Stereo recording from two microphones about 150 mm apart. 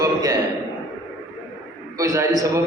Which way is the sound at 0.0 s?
25° right (ahead or behind).